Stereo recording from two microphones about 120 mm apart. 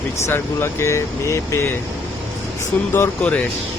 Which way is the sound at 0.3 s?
20° left (ahead or behind).